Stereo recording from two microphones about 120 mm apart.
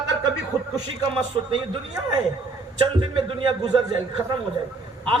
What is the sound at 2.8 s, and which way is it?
A man's voice, 40° right (ahead or behind).